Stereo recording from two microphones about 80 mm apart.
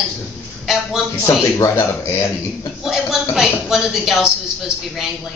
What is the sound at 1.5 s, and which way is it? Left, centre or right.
Speech, left.